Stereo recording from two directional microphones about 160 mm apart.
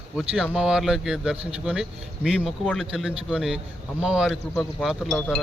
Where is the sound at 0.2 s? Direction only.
5° right (ahead or behind).